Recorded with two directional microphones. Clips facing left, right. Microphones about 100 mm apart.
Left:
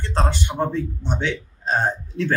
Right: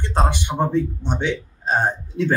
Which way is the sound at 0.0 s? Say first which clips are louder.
Right 2 dB; 15° right (ahead or behind).